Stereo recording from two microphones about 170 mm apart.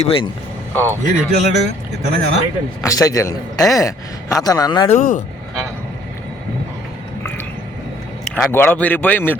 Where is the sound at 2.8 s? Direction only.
20° left (ahead or behind).